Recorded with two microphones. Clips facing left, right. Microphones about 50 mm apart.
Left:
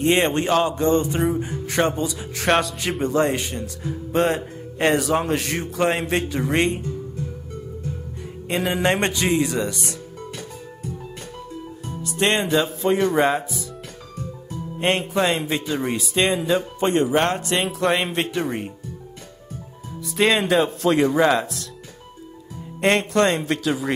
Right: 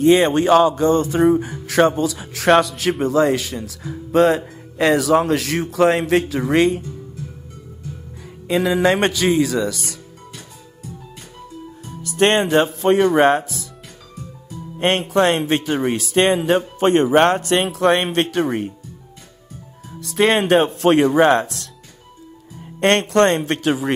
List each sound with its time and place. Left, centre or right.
0.0 s music: right
0.7 s a sound: left
1.4 s music: right
4.1 s music: right
4.7 s a man's voice: right
8.5 s a man's voice: right
9.8 s music: left
12.0 s a man's voice: right
14.8 s a man's voice: right
16.3 s a man's voice: right
20.0 s a man's voice: right